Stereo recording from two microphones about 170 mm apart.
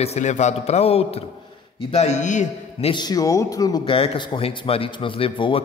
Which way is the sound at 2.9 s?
25° left (ahead or behind).